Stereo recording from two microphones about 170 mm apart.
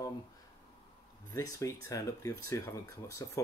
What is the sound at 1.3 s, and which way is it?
Speech, 20° left (ahead or behind).